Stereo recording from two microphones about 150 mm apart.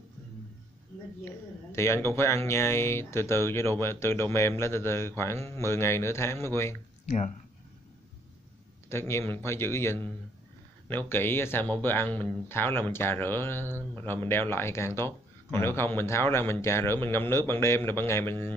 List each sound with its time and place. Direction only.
1.2 s speech: 15° left (ahead or behind)
7.1 s speech: 55° left (ahead or behind)
8.8 s speech: 15° left (ahead or behind)